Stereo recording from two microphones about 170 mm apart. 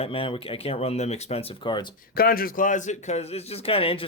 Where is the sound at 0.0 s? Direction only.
30° left (ahead or behind).